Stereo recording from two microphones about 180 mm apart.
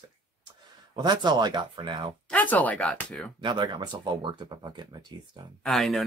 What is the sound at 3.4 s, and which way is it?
Speech, 25° right (ahead or behind).